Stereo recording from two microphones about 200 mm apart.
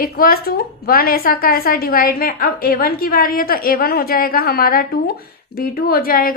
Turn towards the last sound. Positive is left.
turn(degrees=45)  # may be behind; listen again after turning